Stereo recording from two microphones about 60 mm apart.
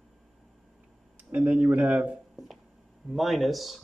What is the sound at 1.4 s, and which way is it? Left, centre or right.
Speech, right.